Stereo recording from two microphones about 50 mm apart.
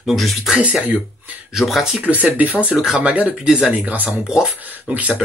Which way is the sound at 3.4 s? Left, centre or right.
Centre.